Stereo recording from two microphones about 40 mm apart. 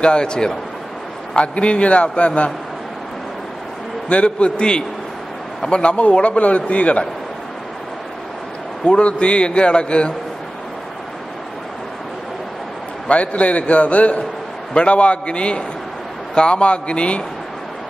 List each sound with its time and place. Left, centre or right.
0.0 s a man's voice: left
4.1 s a man's voice: left
8.8 s a man's voice: left
13.1 s a man's voice: left